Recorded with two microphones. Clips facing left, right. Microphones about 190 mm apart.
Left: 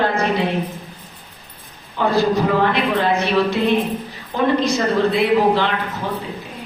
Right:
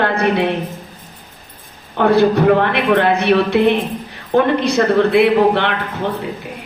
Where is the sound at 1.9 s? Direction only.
60° right (ahead or behind).